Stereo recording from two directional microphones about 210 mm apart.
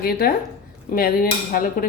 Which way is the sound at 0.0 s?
45° left (ahead or behind).